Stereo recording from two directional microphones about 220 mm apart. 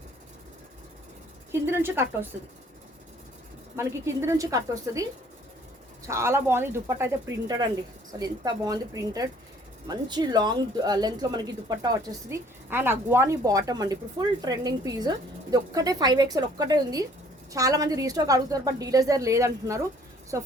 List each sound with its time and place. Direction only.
1.7 s speech: 10° right (ahead or behind)
3.8 s speech: 10° right (ahead or behind)
6.1 s speech: 10° right (ahead or behind)